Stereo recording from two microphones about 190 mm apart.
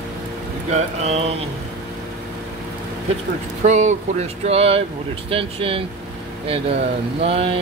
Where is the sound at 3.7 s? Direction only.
40° right (ahead or behind).